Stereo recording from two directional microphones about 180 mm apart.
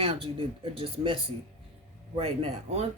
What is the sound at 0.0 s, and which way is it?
Speech, 30° right (ahead or behind).